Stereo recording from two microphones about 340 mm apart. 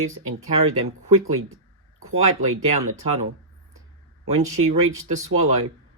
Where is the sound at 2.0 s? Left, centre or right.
Right.